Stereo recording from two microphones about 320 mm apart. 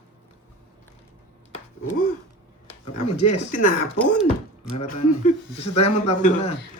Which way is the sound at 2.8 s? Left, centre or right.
Left.